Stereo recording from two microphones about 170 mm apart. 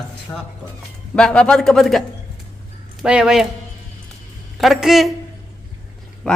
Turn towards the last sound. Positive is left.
turn(degrees=5)  # may be behind; listen again after turning